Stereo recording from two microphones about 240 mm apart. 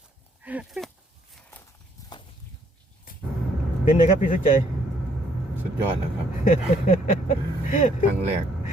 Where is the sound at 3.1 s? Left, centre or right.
Left.